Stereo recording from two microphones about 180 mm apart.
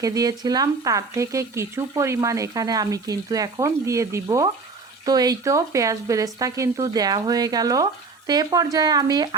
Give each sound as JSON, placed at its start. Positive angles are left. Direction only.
{"t": 0.0, "sound": "speech", "side_deg": -20}